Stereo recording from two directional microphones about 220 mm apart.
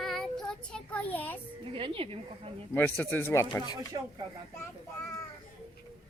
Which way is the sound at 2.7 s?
5° left (ahead or behind).